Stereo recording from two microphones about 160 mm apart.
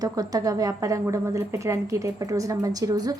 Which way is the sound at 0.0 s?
25° right (ahead or behind).